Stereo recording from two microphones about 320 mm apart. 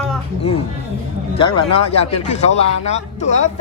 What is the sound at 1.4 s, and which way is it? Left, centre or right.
Speech, centre.